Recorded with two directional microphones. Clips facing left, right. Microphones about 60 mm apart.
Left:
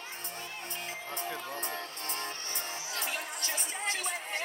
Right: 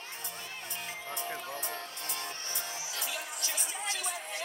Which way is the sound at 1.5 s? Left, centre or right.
Left.